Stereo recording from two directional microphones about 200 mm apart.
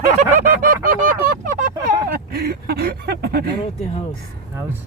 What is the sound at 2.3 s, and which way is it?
Speech, 50° right (ahead or behind).